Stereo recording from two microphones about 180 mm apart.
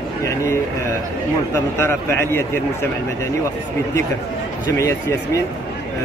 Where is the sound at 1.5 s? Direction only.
15° left (ahead or behind).